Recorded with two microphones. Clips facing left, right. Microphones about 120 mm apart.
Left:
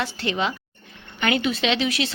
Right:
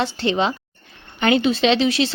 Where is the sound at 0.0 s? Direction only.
30° right (ahead or behind).